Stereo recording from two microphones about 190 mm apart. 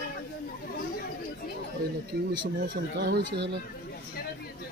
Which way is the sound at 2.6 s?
65° right (ahead or behind).